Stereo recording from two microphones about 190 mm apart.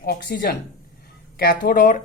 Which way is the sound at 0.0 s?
50° left (ahead or behind).